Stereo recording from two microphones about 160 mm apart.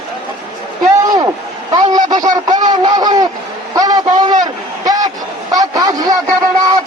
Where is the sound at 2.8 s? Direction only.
25° right (ahead or behind).